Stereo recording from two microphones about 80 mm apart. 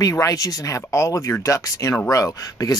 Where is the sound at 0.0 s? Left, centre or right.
Left.